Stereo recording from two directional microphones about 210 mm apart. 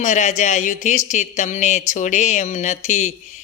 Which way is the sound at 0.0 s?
35° left (ahead or behind).